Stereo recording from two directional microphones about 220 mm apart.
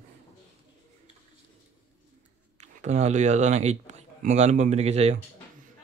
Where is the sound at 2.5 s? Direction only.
30° right (ahead or behind).